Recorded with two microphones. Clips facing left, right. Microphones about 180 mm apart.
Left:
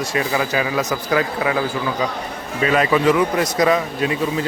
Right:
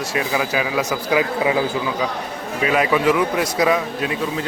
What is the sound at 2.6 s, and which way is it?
A man's voice, 5° right (ahead or behind).